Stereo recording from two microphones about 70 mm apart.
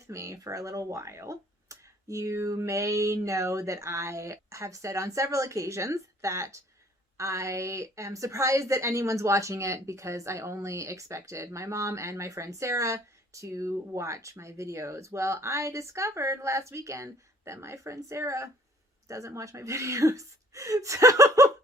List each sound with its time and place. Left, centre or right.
0.1 s a woman's voice: right